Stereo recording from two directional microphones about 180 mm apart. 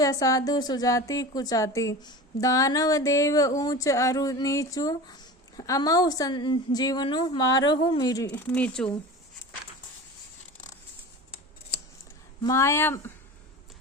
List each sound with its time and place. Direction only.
0.0 s a woman's voice: 20° left (ahead or behind)
8.3 s speech: 10° left (ahead or behind)
12.4 s speech: 15° left (ahead or behind)